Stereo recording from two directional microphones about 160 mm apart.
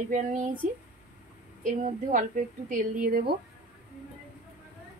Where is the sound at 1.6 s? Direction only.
55° right (ahead or behind).